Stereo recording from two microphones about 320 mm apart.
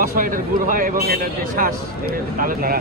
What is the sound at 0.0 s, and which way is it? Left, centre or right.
Speech, right.